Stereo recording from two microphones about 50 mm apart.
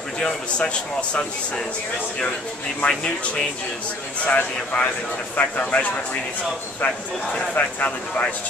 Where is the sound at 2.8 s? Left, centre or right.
Left.